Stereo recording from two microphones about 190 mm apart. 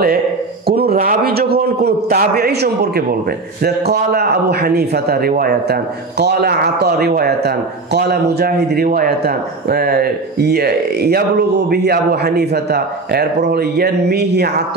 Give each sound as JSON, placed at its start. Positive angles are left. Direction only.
{"t": 0.7, "sound": "a man's voice", "side_deg": -55}